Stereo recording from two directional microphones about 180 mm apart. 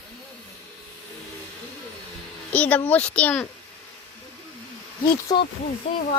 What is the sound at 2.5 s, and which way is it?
Speech, 10° left (ahead or behind).